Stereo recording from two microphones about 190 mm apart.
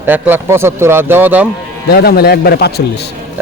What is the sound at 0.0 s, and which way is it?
Speech, 10° right (ahead or behind).